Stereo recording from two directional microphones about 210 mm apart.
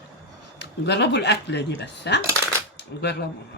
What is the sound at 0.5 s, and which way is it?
Speech, 55° left (ahead or behind).